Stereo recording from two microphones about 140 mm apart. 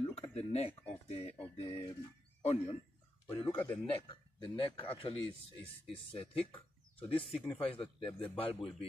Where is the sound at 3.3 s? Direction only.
40° left (ahead or behind).